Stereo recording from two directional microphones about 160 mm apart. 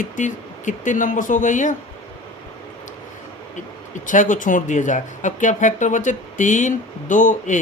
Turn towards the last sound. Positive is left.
turn(degrees=55)  # may be behind; listen again after turning